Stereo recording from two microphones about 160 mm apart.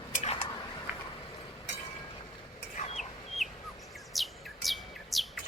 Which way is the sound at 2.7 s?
45° left (ahead or behind).